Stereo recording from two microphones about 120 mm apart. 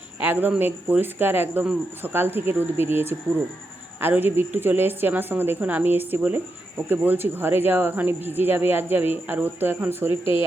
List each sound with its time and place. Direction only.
0.2 s a woman's voice: 15° right (ahead or behind)